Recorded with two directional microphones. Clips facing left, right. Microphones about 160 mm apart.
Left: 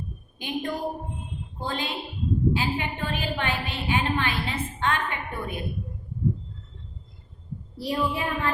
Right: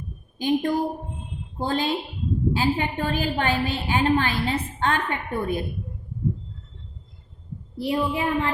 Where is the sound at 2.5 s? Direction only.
40° right (ahead or behind).